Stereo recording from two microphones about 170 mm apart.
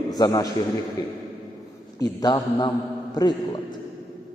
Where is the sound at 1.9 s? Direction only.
25° left (ahead or behind).